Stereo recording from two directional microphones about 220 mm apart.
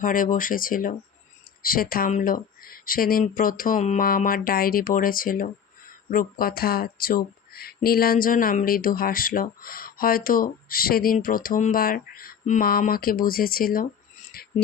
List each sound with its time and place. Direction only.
0.0 s speech: 40° left (ahead or behind)
14.4 s music: 45° left (ahead or behind)